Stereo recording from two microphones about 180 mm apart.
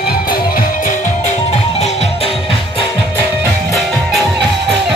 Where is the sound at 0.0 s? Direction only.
55° left (ahead or behind); by 2.3 s 35° left (ahead or behind).